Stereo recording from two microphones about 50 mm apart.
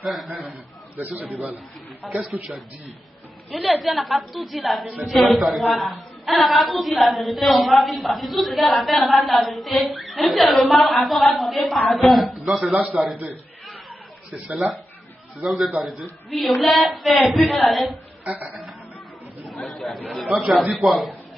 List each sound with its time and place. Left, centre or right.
0.0 s a woman's voice: centre
0.9 s a man's voice: right
2.3 s a woman's voice: centre
3.5 s a woman's voice: centre
14.5 s a woman's voice: centre
17.4 s a woman's voice: centre
17.6 s a woman's voice: centre
18.2 s a sound: right
19.4 s chatter: centre
20.3 s a woman's voice: centre